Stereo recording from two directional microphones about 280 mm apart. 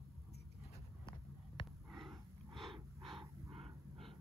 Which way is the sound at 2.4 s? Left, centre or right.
Centre.